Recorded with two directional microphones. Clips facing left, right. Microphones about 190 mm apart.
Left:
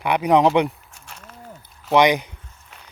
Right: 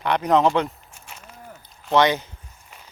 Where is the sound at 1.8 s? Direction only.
10° left (ahead or behind).